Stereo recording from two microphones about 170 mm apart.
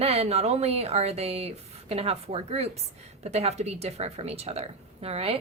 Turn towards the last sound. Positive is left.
turn(degrees=-35)  # may be behind; listen again after turning